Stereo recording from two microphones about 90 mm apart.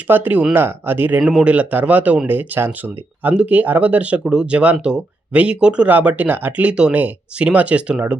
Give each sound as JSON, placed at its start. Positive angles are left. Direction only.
{"t": 0.1, "sound": "speech", "side_deg": -20}
{"t": 1.2, "sound": "speech", "side_deg": -5}